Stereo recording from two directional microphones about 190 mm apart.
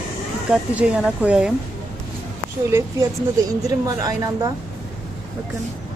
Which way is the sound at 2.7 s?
10° right (ahead or behind).